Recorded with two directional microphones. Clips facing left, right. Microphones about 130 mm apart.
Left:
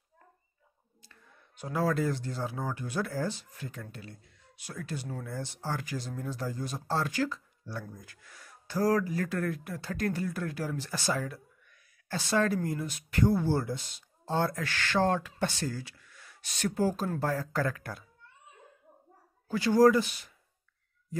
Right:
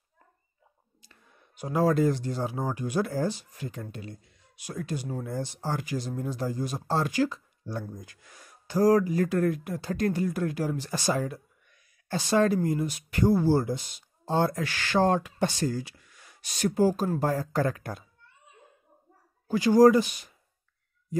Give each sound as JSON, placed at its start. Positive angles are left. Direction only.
{"t": 1.0, "sound": "a sound", "side_deg": -15}
{"t": 2.0, "sound": "speech", "side_deg": -15}
{"t": 19.4, "sound": "speech", "side_deg": -15}